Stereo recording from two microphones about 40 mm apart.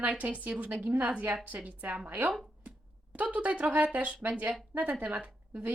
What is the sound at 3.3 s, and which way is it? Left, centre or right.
Speech, right.